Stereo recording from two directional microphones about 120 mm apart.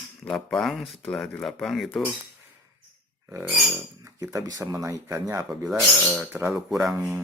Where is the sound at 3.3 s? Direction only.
25° right (ahead or behind).